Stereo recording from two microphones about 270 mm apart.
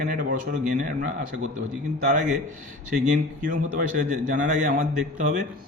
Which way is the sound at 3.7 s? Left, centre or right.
Right.